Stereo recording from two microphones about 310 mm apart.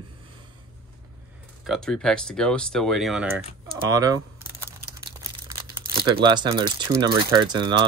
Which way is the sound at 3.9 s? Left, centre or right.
Centre.